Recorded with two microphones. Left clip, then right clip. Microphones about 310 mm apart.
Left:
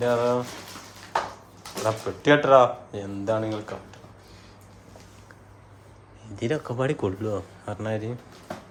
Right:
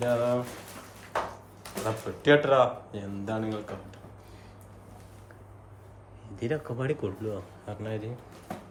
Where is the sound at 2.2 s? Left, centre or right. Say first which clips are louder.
Left 5 dB; centre.